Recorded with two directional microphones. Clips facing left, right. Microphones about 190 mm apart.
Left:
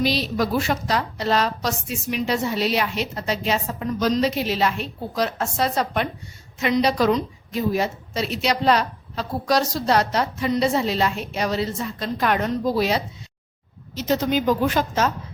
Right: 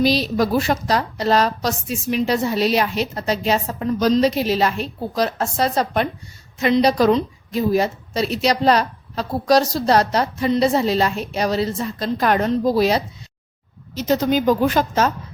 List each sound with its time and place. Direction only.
0.0 s a woman's voice: 40° right (ahead or behind)